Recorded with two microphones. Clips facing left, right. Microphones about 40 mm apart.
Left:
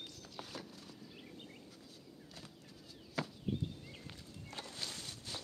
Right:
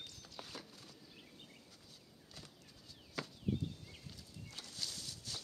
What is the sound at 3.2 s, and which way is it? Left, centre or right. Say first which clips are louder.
Chop: left 4 dB; centre.